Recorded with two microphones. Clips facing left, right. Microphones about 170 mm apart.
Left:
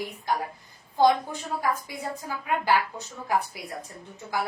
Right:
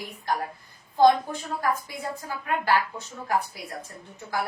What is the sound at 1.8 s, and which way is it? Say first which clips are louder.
Speech: even; 15° left (ahead or behind).